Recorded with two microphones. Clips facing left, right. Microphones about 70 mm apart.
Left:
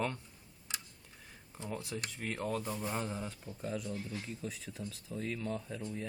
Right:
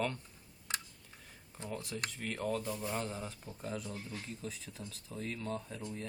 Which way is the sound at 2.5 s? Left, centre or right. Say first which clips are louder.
Even; left.